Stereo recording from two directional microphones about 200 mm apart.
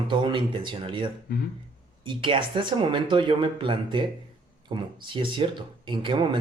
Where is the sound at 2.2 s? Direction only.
25° right (ahead or behind).